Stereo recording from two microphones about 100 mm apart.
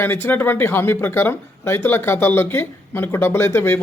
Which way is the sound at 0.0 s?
25° left (ahead or behind).